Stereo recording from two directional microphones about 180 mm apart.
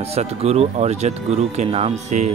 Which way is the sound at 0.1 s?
35° right (ahead or behind).